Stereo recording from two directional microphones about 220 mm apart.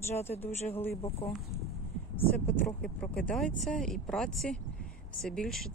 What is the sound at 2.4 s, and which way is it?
Speech, 10° left (ahead or behind).